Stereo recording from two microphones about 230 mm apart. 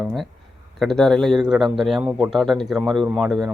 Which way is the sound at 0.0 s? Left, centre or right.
Centre.